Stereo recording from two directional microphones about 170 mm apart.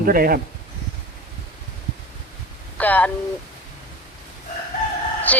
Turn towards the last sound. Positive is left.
turn(degrees=10)  # may be behind; listen again after turning